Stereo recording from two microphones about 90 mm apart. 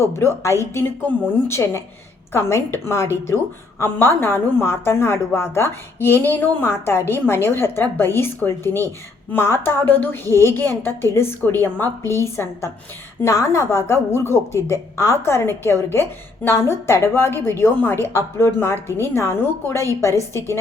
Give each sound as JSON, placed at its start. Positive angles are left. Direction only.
{"t": 0.0, "sound": "a woman's voice", "side_deg": 30}
{"t": 3.8, "sound": "a woman's voice", "side_deg": 20}